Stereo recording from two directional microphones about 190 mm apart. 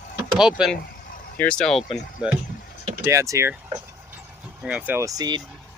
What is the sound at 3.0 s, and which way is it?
Speech, 15° right (ahead or behind).